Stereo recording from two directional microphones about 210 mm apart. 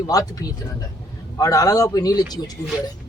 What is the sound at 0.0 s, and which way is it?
Speech, 15° left (ahead or behind).